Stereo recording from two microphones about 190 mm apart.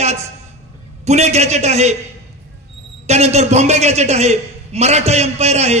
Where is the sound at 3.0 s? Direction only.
35° right (ahead or behind).